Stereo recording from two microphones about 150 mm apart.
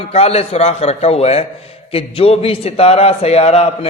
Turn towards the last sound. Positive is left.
turn(degrees=45)  # may be behind; listen again after turning